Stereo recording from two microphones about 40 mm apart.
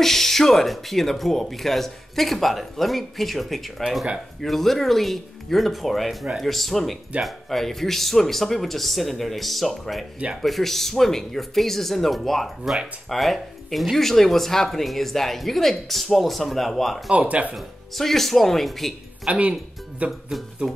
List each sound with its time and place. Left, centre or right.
0.0 s speech: centre
17.1 s speech: right
17.6 s speech: centre
19.3 s speech: right